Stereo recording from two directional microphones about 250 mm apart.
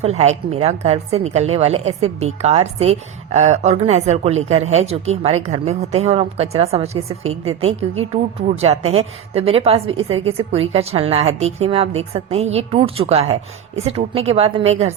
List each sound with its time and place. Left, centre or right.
0.0 s a woman's voice: right